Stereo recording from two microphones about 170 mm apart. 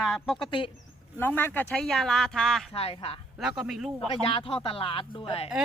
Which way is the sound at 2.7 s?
35° left (ahead or behind).